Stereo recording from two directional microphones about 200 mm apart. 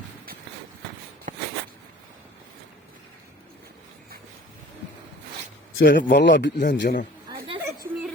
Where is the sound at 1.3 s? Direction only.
40° right (ahead or behind).